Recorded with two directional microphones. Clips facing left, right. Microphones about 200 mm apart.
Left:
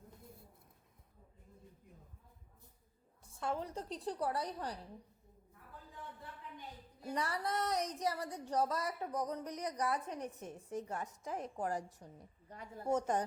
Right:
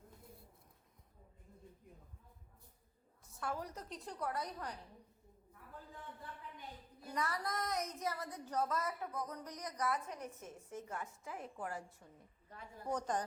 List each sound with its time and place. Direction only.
3.2 s speech: 25° left (ahead or behind)
7.0 s speech: 30° left (ahead or behind)
9.4 s a woman's voice: 10° left (ahead or behind)
9.7 s speech: 35° left (ahead or behind)
10.2 s a woman's voice: 15° left (ahead or behind)
10.8 s speech: 35° left (ahead or behind)